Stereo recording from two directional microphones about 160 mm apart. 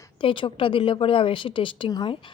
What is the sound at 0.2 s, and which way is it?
A woman's voice, 30° left (ahead or behind).